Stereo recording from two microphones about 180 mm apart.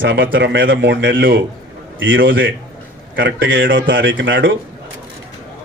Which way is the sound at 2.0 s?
90° right.